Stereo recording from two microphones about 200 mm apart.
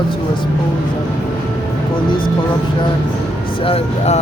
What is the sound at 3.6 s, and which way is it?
Speech, 30° left (ahead or behind).